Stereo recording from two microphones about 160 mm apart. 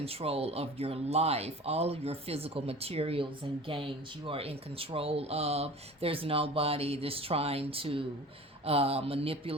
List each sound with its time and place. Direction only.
0.0 s speech: 35° right (ahead or behind)